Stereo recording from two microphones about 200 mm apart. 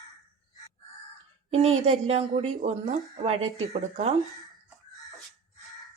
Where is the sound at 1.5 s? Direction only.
30° right (ahead or behind).